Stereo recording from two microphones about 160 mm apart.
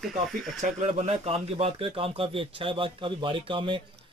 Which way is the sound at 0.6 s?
45° right (ahead or behind).